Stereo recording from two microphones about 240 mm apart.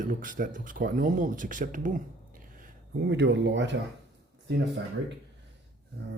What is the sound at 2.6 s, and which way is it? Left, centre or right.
Speech, right.